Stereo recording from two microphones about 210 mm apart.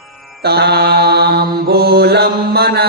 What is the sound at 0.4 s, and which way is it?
Mantra, 50° right (ahead or behind).